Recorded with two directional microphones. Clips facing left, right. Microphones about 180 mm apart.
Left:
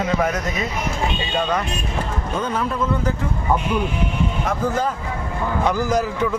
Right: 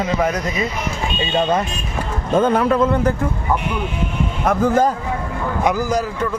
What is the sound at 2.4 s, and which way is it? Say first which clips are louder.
Speech: right 9 dB; 60° right (ahead or behind).